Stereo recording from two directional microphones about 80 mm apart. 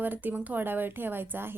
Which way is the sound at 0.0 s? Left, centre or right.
Right.